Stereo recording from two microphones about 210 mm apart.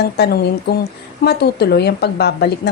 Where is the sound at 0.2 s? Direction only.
50° left (ahead or behind).